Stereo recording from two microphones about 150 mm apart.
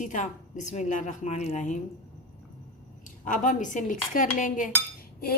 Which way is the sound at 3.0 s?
60° left (ahead or behind).